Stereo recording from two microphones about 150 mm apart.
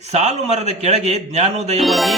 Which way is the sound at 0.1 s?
50° right (ahead or behind).